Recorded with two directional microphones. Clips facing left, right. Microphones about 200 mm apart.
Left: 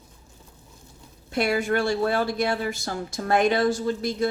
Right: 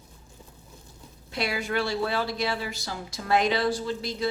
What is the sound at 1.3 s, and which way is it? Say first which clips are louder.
Speech: left 6 dB; 50° left (ahead or behind).